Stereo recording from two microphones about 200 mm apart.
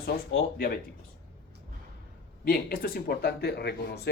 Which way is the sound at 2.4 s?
45° left (ahead or behind).